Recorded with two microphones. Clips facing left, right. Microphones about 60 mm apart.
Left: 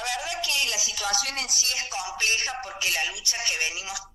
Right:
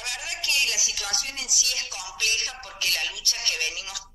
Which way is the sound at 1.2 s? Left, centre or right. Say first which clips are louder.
Left 4 dB; left.